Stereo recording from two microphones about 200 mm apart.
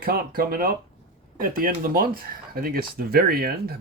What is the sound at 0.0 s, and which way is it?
Speech, 50° right (ahead or behind).